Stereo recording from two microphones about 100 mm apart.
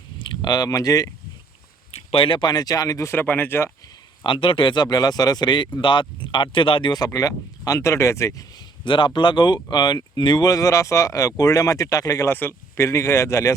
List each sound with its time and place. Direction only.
0.2 s speech: 50° left (ahead or behind)
1.9 s speech: 70° left (ahead or behind); by 3.7 s 20° left (ahead or behind)
4.2 s speech: 60° left (ahead or behind)
6.9 s speech: 35° left (ahead or behind)
8.8 s speech: 55° left (ahead or behind); by 12.3 s 35° left (ahead or behind)
12.3 s speech: 20° left (ahead or behind)